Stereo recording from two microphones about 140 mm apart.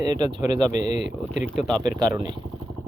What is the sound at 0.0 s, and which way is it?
Speech, 30° right (ahead or behind).